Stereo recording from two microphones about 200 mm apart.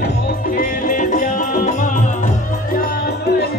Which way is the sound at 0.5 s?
40° left (ahead or behind).